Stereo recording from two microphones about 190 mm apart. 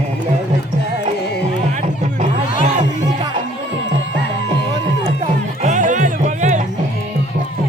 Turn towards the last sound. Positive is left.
turn(degrees=-40)  # may be behind; listen again after turning